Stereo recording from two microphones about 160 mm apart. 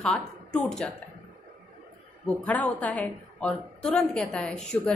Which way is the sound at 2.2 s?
10° left (ahead or behind).